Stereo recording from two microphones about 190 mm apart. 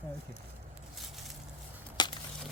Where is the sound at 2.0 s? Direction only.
20° left (ahead or behind).